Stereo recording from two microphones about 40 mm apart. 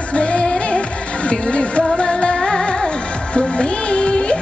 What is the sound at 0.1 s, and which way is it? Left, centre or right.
Music, left.